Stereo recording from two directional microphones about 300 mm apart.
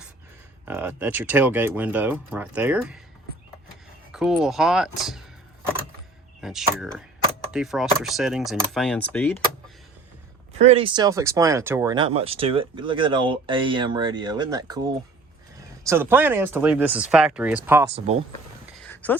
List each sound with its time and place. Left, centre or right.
0.6 s speech: centre
4.1 s speech: centre
6.4 s speech: centre
10.6 s speech: centre
17.9 s speech: right
18.8 s a sound: centre